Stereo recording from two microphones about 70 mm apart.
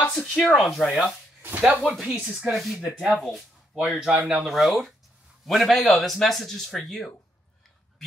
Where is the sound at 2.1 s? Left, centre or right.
Centre.